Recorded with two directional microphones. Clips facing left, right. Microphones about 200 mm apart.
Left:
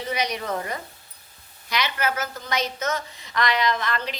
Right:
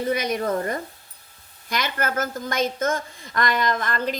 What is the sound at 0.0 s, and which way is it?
A woman's voice, 50° right (ahead or behind).